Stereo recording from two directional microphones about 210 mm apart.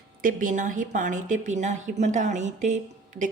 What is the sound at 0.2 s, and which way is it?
A woman's voice, 40° right (ahead or behind).